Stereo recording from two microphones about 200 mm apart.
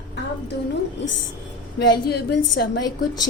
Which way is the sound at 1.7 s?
55° left (ahead or behind).